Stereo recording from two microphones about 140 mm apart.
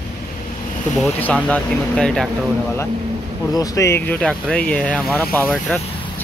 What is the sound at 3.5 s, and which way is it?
Speech, 25° left (ahead or behind).